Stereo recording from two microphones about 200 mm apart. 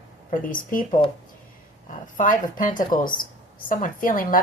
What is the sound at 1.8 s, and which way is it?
A woman's voice, 40° left (ahead or behind).